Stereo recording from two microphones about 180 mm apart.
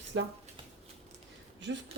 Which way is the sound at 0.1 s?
90° right.